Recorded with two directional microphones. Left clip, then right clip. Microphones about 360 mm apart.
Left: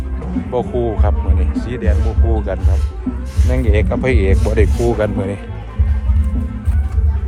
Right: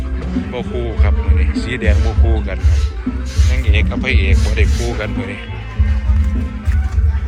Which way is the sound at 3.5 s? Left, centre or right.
Centre.